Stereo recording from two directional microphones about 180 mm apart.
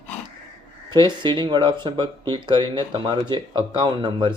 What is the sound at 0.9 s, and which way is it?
Speech, 25° right (ahead or behind).